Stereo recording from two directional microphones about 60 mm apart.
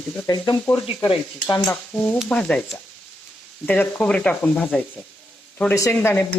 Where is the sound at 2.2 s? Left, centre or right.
Centre.